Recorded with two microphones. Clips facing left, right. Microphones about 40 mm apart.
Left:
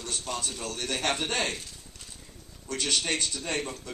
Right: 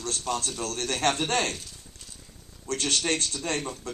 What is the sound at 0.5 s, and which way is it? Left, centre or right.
Speech, centre.